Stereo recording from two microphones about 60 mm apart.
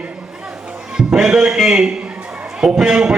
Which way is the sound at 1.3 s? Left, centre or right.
Centre.